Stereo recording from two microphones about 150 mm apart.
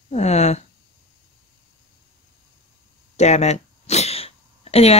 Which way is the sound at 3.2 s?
50° left (ahead or behind).